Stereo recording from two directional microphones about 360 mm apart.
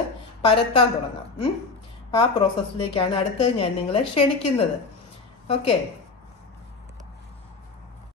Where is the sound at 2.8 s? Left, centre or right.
Centre.